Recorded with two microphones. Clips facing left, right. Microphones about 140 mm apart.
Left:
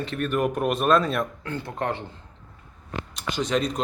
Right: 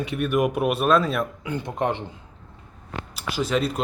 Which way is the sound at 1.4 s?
15° right (ahead or behind).